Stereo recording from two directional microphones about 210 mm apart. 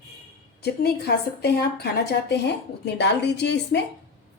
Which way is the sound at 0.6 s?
50° left (ahead or behind).